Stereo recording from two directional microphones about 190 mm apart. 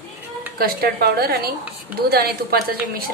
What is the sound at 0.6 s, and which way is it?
A woman's voice, 55° right (ahead or behind).